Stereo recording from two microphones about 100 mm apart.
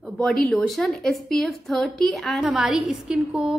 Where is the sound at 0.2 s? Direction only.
5° left (ahead or behind).